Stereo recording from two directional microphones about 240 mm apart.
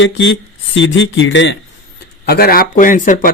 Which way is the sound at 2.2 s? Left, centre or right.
Left.